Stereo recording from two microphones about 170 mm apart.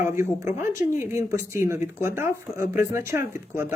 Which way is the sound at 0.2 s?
15° right (ahead or behind).